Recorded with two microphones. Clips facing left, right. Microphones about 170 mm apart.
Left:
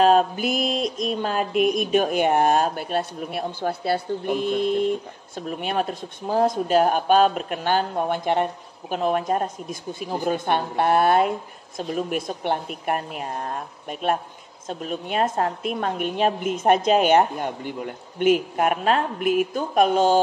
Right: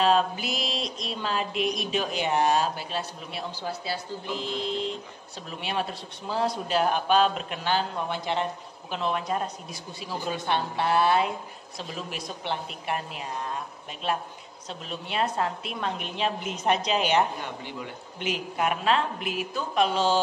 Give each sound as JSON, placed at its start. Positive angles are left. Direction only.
{"t": 0.0, "sound": "mantra", "side_deg": 45}